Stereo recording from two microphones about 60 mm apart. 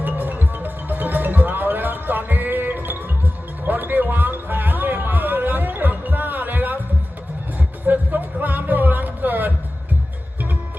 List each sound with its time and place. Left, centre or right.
0.0 s music: right
7.9 s music: right